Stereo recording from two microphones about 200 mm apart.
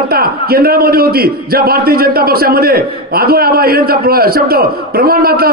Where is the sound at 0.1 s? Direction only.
50° right (ahead or behind).